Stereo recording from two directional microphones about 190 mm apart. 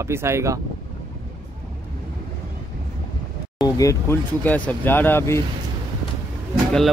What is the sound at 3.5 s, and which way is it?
Speech, 20° left (ahead or behind).